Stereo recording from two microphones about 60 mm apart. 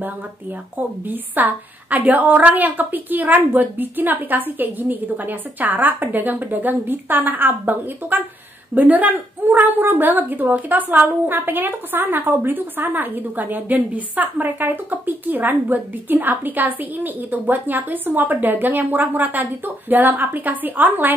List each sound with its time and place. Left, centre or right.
0.7 s a woman's voice: right